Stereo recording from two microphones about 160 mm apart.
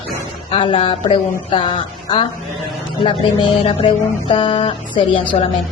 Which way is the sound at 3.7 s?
35° left (ahead or behind).